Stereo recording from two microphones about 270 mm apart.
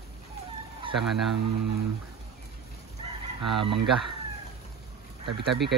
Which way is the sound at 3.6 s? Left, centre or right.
Right.